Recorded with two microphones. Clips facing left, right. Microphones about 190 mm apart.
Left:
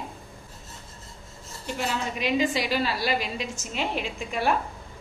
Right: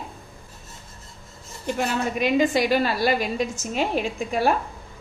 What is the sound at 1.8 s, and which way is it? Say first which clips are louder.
A woman's voice: right 5 dB; 50° right (ahead or behind).